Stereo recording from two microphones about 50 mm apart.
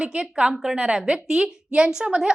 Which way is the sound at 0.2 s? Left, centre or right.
Centre.